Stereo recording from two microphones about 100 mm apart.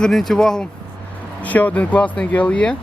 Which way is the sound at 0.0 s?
5° left (ahead or behind).